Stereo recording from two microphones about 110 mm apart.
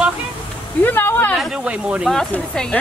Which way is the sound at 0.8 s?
20° left (ahead or behind).